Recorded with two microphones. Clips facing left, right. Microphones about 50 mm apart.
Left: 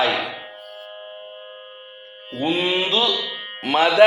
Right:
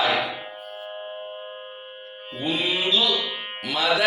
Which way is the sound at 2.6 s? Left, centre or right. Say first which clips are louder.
Left 1 dB; left.